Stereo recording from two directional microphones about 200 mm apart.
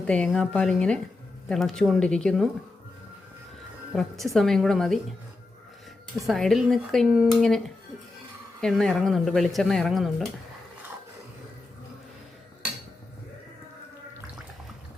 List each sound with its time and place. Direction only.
0.1 s speech: 5° left (ahead or behind)
3.9 s speech: centre (ahead or behind)
6.2 s speech: centre (ahead or behind)
8.6 s speech: centre (ahead or behind)